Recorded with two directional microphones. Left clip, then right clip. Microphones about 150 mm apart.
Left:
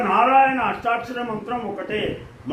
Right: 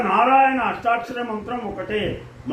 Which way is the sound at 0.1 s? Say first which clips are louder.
Even; 20° left (ahead or behind).